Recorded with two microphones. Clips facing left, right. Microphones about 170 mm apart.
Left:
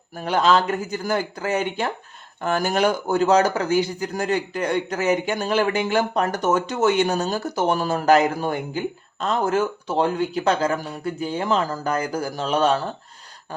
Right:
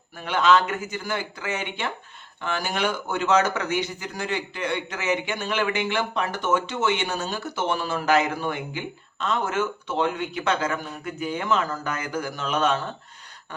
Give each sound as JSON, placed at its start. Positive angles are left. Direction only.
{"t": 0.1, "sound": "speech", "side_deg": 40}
{"t": 4.1, "sound": "speech", "side_deg": 40}